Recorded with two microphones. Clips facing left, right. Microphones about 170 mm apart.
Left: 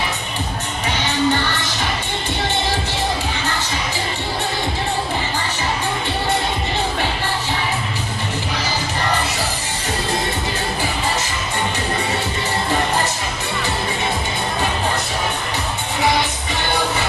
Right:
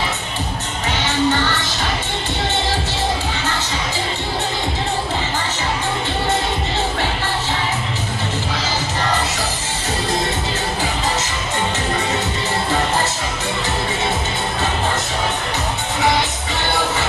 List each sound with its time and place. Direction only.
1.0 s music: 15° left (ahead or behind)